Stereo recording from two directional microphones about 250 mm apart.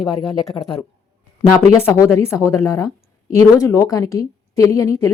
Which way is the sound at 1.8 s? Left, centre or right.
Centre.